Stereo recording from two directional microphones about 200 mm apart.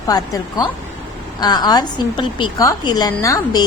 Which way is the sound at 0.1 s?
20° left (ahead or behind).